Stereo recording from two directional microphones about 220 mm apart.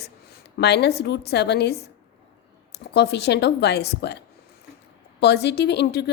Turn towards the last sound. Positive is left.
turn(degrees=50)  # may be behind; listen again after turning